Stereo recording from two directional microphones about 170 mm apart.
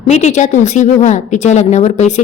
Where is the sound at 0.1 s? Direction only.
45° left (ahead or behind).